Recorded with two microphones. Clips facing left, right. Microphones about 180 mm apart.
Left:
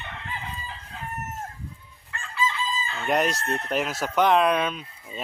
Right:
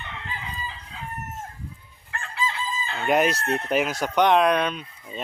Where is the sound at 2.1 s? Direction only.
65° right (ahead or behind).